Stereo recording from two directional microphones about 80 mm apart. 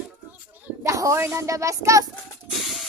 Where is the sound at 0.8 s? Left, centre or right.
Right.